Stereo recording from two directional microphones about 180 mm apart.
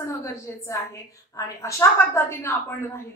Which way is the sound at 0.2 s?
15° left (ahead or behind).